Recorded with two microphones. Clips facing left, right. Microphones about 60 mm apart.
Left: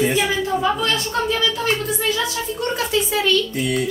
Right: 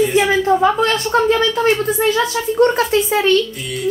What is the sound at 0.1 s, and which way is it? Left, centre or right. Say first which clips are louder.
A woman's voice: right 6 dB; right.